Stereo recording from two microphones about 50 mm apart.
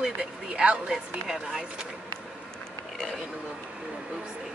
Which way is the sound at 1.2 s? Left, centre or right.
Centre.